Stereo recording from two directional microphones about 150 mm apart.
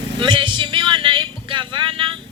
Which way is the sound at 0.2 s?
35° right (ahead or behind).